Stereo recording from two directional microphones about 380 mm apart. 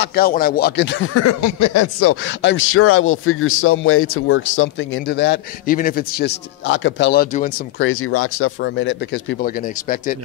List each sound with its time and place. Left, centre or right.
0.0 s speech: left